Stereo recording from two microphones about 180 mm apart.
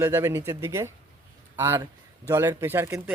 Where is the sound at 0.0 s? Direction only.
15° right (ahead or behind).